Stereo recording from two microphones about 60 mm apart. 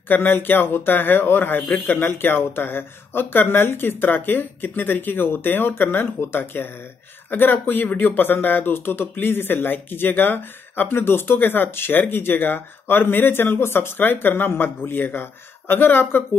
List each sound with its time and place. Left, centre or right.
0.1 s speech: left